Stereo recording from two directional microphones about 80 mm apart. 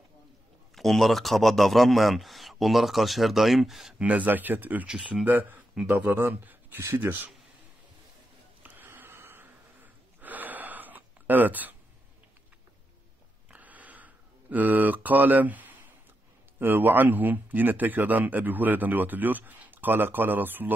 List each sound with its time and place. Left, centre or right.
0.7 s a man's voice: centre
4.0 s speech: centre
4.8 s speech: centre
5.2 s speech: right
8.6 s snort: right
13.5 s a sound: centre
16.5 s speech: right